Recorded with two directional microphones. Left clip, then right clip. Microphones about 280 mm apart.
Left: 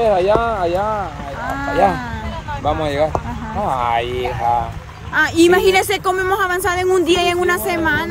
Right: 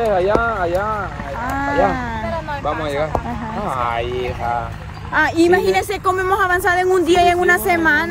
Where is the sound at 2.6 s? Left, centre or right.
Left.